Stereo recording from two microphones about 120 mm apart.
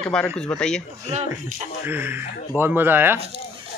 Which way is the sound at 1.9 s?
15° right (ahead or behind).